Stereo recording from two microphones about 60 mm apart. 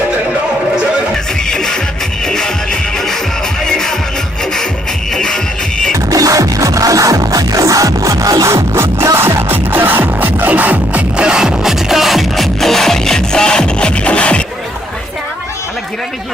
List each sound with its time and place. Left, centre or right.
1.1 s music: centre
5.1 s music: centre
6.1 s music: right
8.5 s music: right
11.2 s music: centre